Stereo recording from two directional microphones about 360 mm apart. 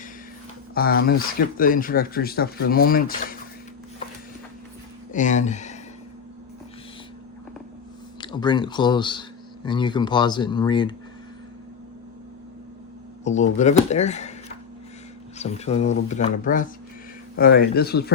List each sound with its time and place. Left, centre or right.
0.7 s speech: left
5.1 s speech: centre
8.2 s speech: centre
13.2 s speech: centre
15.4 s speech: centre